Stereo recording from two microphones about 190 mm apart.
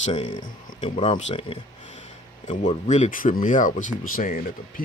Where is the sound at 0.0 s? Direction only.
30° left (ahead or behind).